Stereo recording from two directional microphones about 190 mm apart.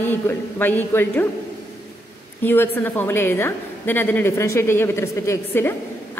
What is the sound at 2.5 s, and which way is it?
A woman's voice, 10° left (ahead or behind).